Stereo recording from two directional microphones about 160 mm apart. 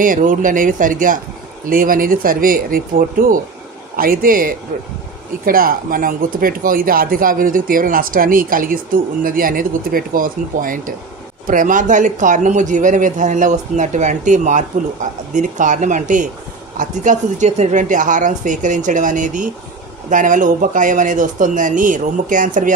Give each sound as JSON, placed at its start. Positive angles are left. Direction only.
{"t": 0.0, "sound": "speech", "side_deg": -55}